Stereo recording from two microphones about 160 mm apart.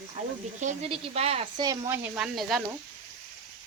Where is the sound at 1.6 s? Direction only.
20° right (ahead or behind).